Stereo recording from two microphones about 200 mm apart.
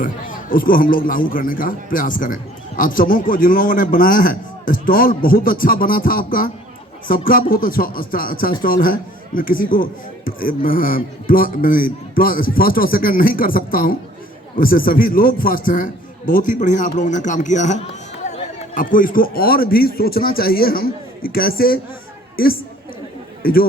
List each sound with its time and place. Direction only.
0.0 s a man's voice: 45° left (ahead or behind)
23.4 s speech: 45° left (ahead or behind)